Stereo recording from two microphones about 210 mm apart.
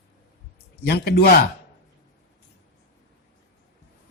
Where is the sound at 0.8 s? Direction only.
50° left (ahead or behind).